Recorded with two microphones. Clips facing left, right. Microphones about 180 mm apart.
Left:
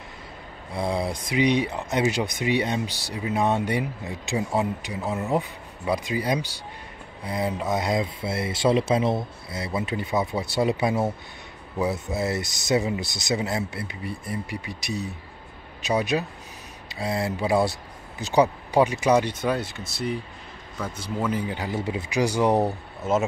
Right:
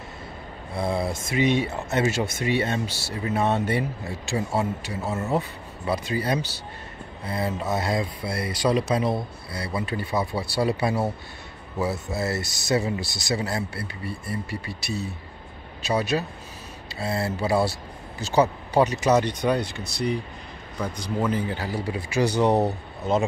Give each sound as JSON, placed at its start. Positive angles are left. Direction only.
{"t": 0.7, "sound": "speech", "side_deg": 15}
{"t": 20.7, "sound": "a man's voice", "side_deg": -15}
{"t": 21.3, "sound": "speech", "side_deg": 10}